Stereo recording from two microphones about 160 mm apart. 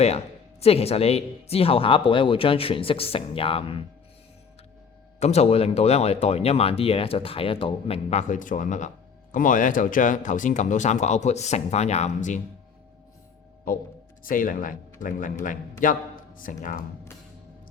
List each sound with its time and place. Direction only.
0.6 s speech: 40° left (ahead or behind)
5.2 s speech: 40° left (ahead or behind)
14.3 s a man's voice: 60° left (ahead or behind)